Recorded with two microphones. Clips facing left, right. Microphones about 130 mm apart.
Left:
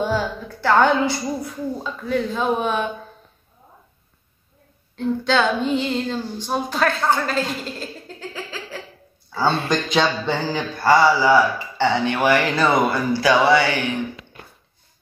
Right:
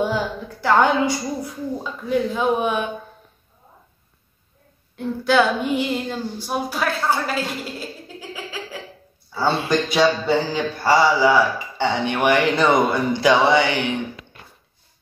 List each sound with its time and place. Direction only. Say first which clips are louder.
0.0 s a woman's voice: even; 15° right (ahead or behind)
4.9 s a woman's voice: right 2 dB; 10° right (ahead or behind)
7.8 s a sound: left 1 dB; 10° right (ahead or behind)
9.7 s a woman's voice: right 2 dB; 10° right (ahead or behind)